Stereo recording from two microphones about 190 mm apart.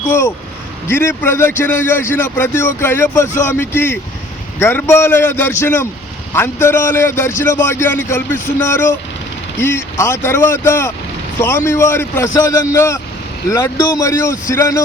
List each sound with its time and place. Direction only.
0.0 s a man's voice: 10° left (ahead or behind)